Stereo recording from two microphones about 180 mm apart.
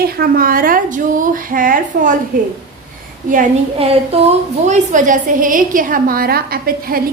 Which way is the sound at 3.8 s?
35° right (ahead or behind).